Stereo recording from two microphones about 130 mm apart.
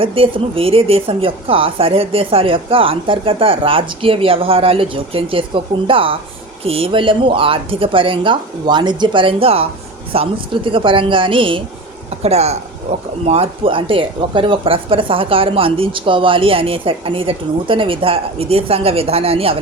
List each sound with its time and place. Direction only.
0.0 s speech: 45° right (ahead or behind)
12.2 s speech: 55° right (ahead or behind)